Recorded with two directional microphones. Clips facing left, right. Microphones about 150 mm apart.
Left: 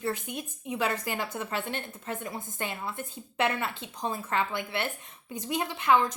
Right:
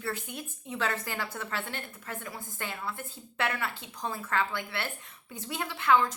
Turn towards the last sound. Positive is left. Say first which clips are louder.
# left 1 dB
turn(degrees=20)  # may be behind; listen again after turning